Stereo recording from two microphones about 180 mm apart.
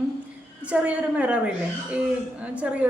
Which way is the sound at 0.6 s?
5° right (ahead or behind).